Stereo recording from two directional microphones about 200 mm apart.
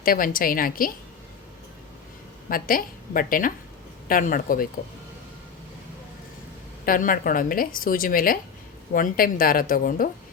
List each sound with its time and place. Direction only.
0.0 s a woman's voice: 45° left (ahead or behind)
2.5 s a woman's voice: 45° left (ahead or behind)
6.8 s a woman's voice: 45° left (ahead or behind)